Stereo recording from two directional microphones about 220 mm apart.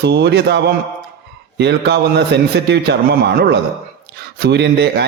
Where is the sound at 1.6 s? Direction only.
50° right (ahead or behind).